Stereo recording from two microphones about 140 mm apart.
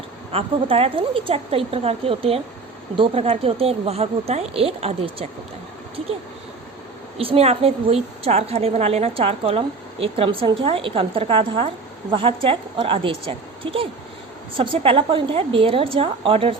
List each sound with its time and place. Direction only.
0.3 s a woman's voice: 45° right (ahead or behind)
7.2 s a woman's voice: 45° right (ahead or behind)